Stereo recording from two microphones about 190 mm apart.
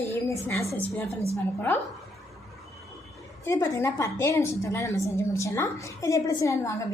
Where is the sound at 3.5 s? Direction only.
15° left (ahead or behind).